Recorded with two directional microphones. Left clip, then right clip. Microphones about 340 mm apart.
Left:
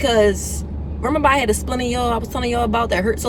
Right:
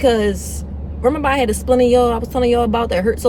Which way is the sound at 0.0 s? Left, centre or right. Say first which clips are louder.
Even; centre.